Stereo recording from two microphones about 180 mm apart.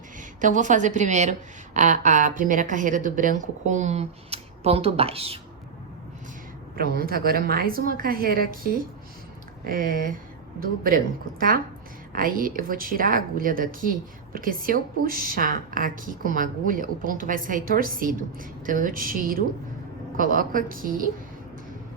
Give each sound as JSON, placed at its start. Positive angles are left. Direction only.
{"t": 0.2, "sound": "a woman's voice", "side_deg": -45}
{"t": 6.7, "sound": "a woman's voice", "side_deg": -55}
{"t": 9.6, "sound": "a woman's voice", "side_deg": -50}